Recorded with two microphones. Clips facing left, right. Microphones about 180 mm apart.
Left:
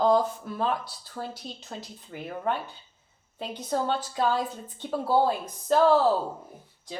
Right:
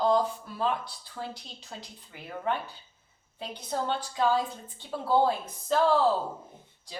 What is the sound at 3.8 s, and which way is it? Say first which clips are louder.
Speech: left 2 dB; 40° left (ahead or behind).